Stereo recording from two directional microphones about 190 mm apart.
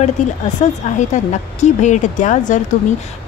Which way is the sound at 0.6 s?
40° left (ahead or behind).